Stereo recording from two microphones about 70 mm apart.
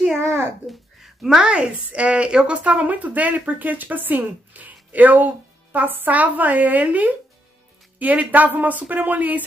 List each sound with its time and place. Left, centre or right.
0.2 s babbling: right
1.2 s a woman's voice: centre